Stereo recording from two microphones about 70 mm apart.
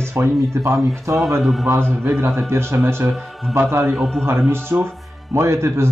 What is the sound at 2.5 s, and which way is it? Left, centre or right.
Speech, right.